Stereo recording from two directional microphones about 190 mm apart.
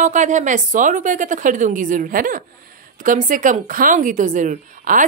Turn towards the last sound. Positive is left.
turn(degrees=-45)  # may be behind; listen again after turning